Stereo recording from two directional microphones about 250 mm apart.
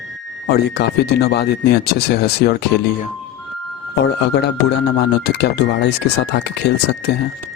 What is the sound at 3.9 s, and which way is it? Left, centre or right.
Speech, left.